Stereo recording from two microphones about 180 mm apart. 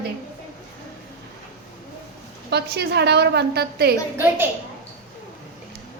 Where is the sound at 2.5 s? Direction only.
65° right (ahead or behind).